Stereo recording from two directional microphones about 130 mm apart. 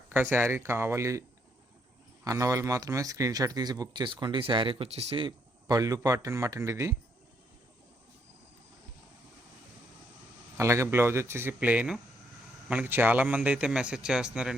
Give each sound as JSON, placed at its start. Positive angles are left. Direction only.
{"t": 0.1, "sound": "speech", "side_deg": -15}
{"t": 2.2, "sound": "speech", "side_deg": -25}
{"t": 5.2, "sound": "speech", "side_deg": -30}
{"t": 10.6, "sound": "a man's voice", "side_deg": -20}